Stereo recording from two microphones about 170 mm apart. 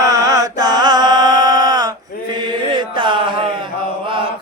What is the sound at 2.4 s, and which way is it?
Mantra, 30° right (ahead or behind).